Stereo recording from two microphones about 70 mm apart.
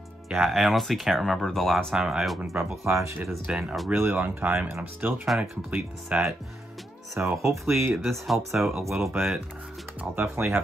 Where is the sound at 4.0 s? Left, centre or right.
Right; by 6.3 s centre.